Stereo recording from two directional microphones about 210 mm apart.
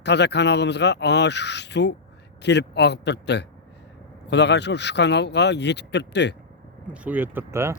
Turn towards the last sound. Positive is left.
turn(degrees=-10)  # may be behind; listen again after turning